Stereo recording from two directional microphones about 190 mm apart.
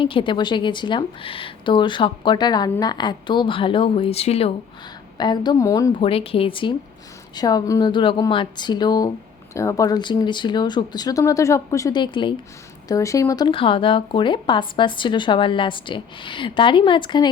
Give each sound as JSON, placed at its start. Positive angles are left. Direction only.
{"t": 0.0, "sound": "speech", "side_deg": 25}
{"t": 6.0, "sound": "speech", "side_deg": 30}